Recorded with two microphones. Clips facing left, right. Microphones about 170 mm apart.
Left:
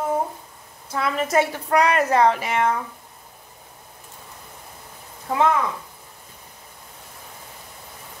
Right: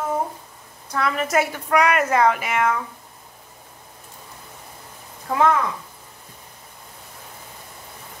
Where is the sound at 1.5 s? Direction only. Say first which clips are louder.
Even; 30° left (ahead or behind).